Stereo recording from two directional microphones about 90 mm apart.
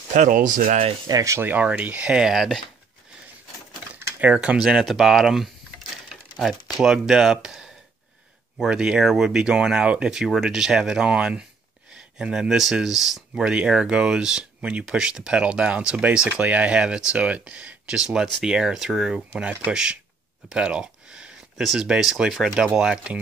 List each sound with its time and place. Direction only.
1.0 s speech: 40° right (ahead or behind)
1.4 s speech: 20° right (ahead or behind); by 2.6 s 5° right (ahead or behind)
3.7 s a sound: 15° right (ahead or behind)
6.8 s speech: 5° right (ahead or behind)